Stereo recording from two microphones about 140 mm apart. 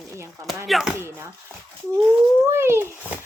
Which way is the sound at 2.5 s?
20° right (ahead or behind).